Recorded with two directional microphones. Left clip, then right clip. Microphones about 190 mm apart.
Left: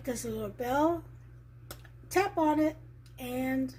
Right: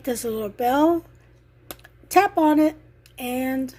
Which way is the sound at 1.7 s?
55° right (ahead or behind).